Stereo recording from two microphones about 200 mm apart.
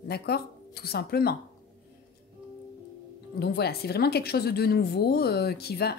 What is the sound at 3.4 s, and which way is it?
Speech, 50° left (ahead or behind).